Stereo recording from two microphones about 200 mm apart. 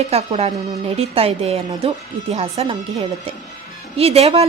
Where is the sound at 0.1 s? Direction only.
30° right (ahead or behind).